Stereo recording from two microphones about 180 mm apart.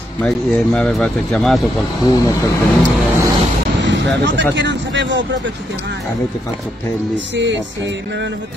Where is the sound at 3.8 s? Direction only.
80° right.